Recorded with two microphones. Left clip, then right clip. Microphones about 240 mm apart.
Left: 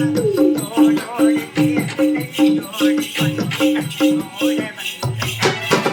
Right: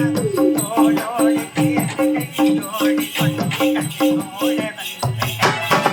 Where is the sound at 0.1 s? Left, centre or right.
Centre.